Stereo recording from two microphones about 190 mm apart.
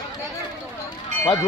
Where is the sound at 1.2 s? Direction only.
15° left (ahead or behind).